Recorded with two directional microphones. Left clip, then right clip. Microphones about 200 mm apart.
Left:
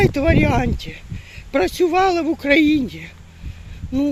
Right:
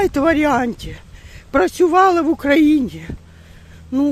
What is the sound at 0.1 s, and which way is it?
Speech, 25° right (ahead or behind).